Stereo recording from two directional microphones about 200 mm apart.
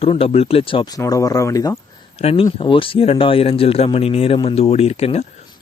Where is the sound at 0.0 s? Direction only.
30° left (ahead or behind).